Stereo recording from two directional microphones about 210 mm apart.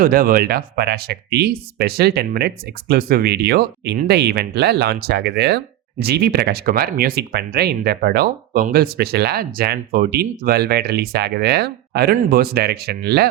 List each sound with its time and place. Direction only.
0.0 s speech: 40° right (ahead or behind)